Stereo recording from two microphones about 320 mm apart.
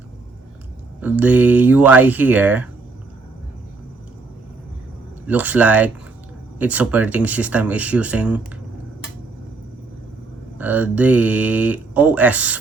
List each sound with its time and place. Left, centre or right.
1.0 s speech: centre
5.3 s speech: centre
10.6 s speech: centre